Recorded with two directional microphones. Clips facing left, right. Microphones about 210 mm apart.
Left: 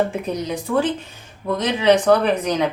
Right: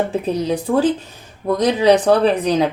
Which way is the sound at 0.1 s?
30° right (ahead or behind).